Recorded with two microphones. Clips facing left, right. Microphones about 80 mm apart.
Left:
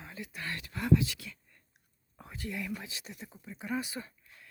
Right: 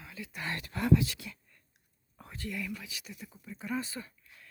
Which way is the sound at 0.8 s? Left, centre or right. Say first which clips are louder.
Right 1 dB; right.